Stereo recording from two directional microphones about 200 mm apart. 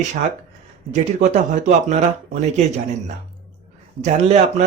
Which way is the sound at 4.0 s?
35° right (ahead or behind).